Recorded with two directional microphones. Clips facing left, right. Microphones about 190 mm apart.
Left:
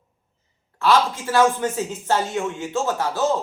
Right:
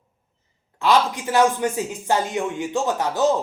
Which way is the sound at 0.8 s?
15° right (ahead or behind).